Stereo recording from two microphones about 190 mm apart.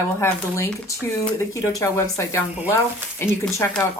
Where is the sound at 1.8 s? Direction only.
15° left (ahead or behind).